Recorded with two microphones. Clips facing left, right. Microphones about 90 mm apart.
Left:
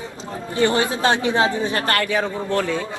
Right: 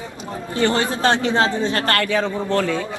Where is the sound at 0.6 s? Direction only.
15° left (ahead or behind).